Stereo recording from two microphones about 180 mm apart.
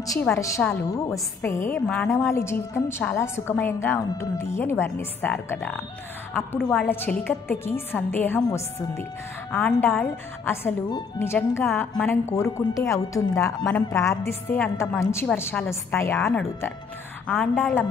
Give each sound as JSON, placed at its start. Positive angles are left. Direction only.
{"t": 0.0, "sound": "a woman's voice", "side_deg": 20}
{"t": 0.6, "sound": "a woman's voice", "side_deg": 5}
{"t": 0.9, "sound": "a woman's voice", "side_deg": 20}
{"t": 9.5, "sound": "a woman's voice", "side_deg": 5}
{"t": 10.4, "sound": "a woman's voice", "side_deg": 15}